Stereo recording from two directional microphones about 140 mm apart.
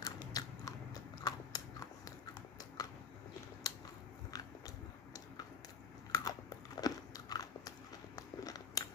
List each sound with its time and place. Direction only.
0.0 s biting: 25° left (ahead or behind)
3.6 s a sound: 25° left (ahead or behind)
6.1 s biting: 25° left (ahead or behind)